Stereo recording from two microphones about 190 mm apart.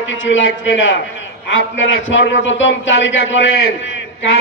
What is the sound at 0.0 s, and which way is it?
A man's voice, 85° left.